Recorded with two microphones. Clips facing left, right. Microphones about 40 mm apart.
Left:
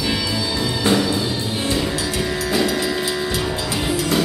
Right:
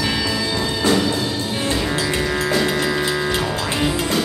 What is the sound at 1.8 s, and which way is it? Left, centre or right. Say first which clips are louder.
Music: right 2 dB; right.